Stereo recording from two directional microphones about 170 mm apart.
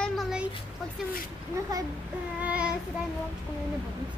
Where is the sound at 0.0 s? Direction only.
Centre (ahead or behind).